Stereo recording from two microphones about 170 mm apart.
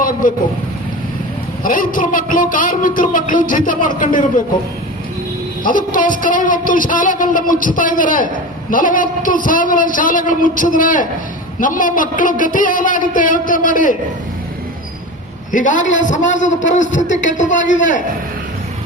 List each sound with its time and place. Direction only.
0.0 s speech: 55° left (ahead or behind)
1.6 s a man's voice: 55° left (ahead or behind)
5.6 s a man's voice: 50° left (ahead or behind)
15.5 s a man's voice: 50° left (ahead or behind)